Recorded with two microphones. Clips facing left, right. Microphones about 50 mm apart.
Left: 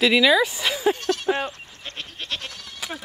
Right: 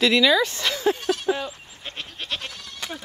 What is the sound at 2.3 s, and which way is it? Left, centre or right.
Goat, centre.